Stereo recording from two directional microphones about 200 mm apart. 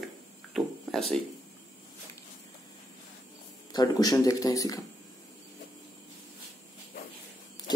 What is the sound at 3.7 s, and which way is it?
Speech, 20° left (ahead or behind).